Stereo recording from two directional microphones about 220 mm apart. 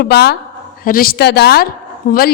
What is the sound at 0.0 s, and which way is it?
A woman's voice, 45° left (ahead or behind).